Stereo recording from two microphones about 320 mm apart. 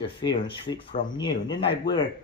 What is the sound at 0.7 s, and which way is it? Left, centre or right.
Speech, centre.